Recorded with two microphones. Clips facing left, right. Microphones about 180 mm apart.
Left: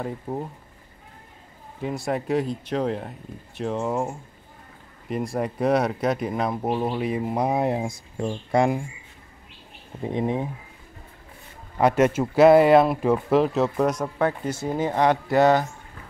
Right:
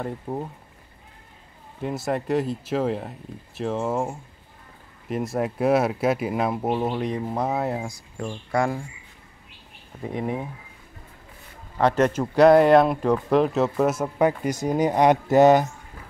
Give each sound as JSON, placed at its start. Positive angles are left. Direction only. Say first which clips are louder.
{"t": 0.0, "sound": "speech", "louder": "even", "side_deg": 0}
{"t": 1.8, "sound": "speech", "louder": "even", "side_deg": 0}
{"t": 10.0, "sound": "speech", "louder": "left 3 dB", "side_deg": 25}
{"t": 11.8, "sound": "speech", "louder": "left 1 dB", "side_deg": 10}